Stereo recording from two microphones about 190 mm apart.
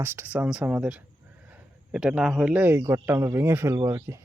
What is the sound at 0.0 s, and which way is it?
A man's voice, 10° right (ahead or behind).